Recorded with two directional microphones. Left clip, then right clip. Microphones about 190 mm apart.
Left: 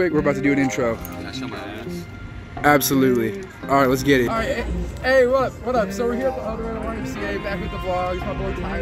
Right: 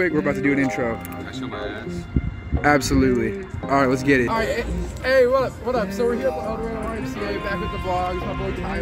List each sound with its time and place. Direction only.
0.0 s a man's voice: 5° left (ahead or behind)
2.6 s a man's voice: 5° left (ahead or behind)